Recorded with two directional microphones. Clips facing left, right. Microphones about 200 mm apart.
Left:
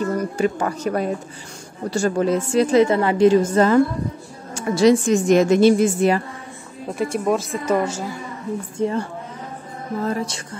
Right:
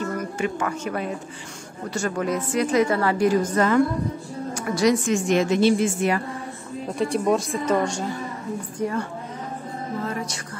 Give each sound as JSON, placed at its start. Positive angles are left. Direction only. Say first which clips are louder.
{"t": 0.0, "sound": "a woman's voice", "louder": "left 5 dB", "side_deg": 35}
{"t": 7.0, "sound": "speech", "louder": "left 1 dB", "side_deg": 0}
{"t": 8.7, "sound": "a woman's voice", "louder": "left 4 dB", "side_deg": 25}
{"t": 10.0, "sound": "a woman's voice", "louder": "left 5 dB", "side_deg": 30}